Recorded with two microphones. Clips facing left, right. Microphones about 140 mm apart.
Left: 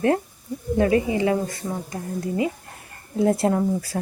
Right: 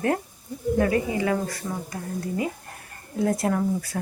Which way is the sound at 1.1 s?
25° left (ahead or behind).